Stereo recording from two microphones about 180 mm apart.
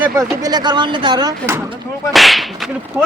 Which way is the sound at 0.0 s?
20° right (ahead or behind).